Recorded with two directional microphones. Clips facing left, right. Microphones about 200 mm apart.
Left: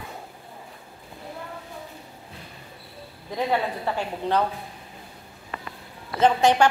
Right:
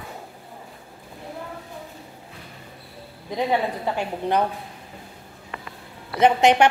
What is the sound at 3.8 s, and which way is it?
Speech, 15° right (ahead or behind).